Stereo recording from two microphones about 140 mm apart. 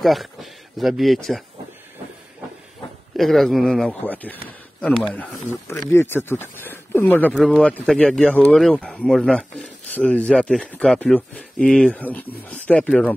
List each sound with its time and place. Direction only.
0.0 s speech: centre (ahead or behind)
3.2 s speech: centre (ahead or behind)